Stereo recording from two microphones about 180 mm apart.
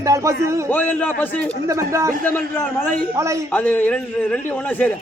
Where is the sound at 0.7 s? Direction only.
10° left (ahead or behind).